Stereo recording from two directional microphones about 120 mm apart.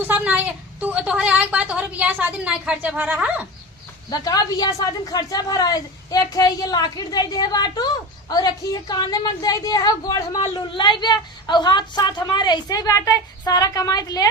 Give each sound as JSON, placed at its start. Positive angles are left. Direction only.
{"t": 0.0, "sound": "a woman's voice", "side_deg": -15}
{"t": 4.1, "sound": "a woman's voice", "side_deg": 30}